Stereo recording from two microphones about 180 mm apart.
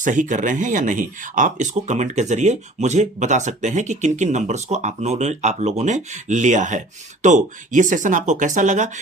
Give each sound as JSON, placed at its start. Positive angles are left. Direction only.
{"t": 0.0, "sound": "speech", "side_deg": -45}